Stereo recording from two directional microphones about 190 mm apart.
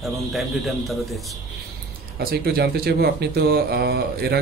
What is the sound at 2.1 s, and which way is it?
Speech, 55° right (ahead or behind).